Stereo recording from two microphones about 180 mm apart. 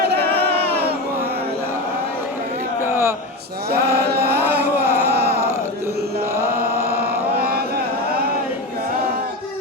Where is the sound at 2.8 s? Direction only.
15° right (ahead or behind).